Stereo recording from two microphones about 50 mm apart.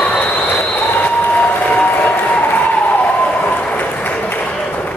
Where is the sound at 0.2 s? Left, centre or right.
Left.